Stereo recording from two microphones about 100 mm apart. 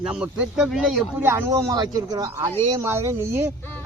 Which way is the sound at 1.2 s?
20° right (ahead or behind).